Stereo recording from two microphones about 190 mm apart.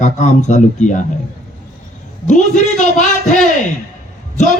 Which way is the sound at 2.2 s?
40° left (ahead or behind).